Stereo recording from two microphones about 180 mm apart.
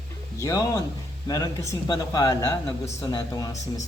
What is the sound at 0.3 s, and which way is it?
Speech, 15° left (ahead or behind).